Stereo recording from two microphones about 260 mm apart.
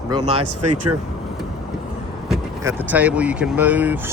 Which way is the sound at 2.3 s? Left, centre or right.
Centre.